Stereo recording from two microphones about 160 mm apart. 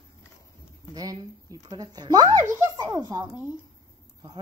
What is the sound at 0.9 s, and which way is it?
Speech, 25° right (ahead or behind).